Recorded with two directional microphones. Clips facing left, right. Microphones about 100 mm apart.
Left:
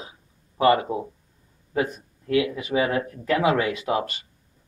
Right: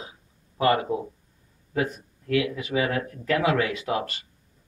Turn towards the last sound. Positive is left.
turn(degrees=20)  # may be behind; listen again after turning